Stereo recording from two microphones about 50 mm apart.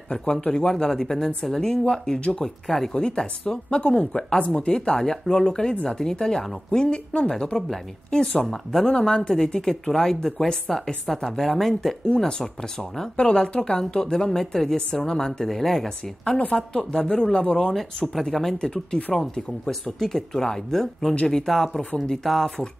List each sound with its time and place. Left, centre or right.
0.1 s speech: centre
2.1 s speech: left
2.4 s speech: centre
12.0 s speech: centre
16.3 s speech: left
16.5 s speech: centre
17.7 s speech: centre
21.9 s speech: centre
22.2 s speech: centre